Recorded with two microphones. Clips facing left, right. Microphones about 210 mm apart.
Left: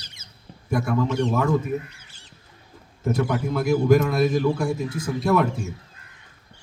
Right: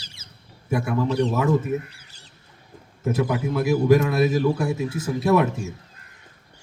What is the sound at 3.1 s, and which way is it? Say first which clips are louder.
A man's voice: even; 5° right (ahead or behind).